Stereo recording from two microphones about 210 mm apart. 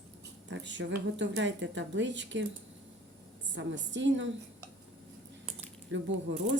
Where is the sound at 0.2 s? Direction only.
60° right (ahead or behind).